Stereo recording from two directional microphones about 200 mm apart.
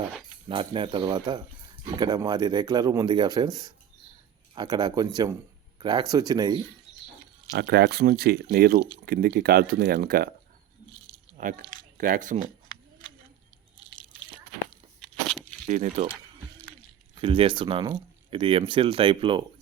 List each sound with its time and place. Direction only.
0.4 s speech: 25° right (ahead or behind)
7.5 s speech: 55° right (ahead or behind)
11.3 s speech: 40° right (ahead or behind)
15.0 s crunch: 5° left (ahead or behind)
15.6 s speech: 35° right (ahead or behind)
17.2 s speech: 25° right (ahead or behind)